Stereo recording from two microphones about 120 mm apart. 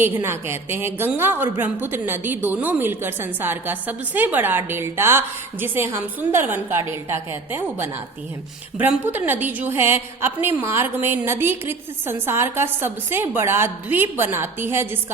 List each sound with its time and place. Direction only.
0.0 s a woman's voice: 20° right (ahead or behind)